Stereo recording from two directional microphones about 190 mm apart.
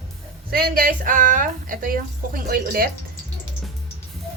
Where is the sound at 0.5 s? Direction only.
50° right (ahead or behind).